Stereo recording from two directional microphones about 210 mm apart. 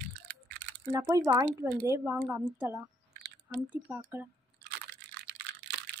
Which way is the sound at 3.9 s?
10° right (ahead or behind).